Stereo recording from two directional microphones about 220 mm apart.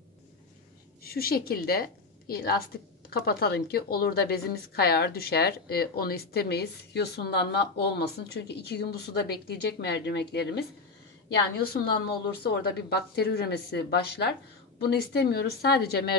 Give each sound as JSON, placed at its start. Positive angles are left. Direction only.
{"t": 1.0, "sound": "a woman's voice", "side_deg": 45}